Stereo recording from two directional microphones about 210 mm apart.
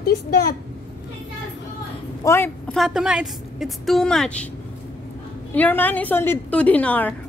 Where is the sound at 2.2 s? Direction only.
10° left (ahead or behind).